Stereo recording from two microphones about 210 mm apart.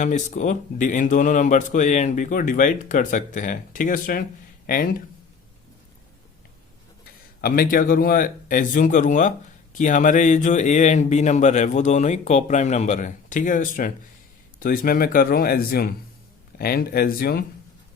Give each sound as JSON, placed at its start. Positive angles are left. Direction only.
{"t": 0.0, "sound": "speech", "side_deg": 35}
{"t": 7.4, "sound": "speech", "side_deg": 45}